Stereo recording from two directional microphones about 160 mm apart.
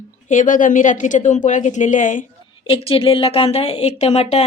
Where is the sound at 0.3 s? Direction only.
55° left (ahead or behind).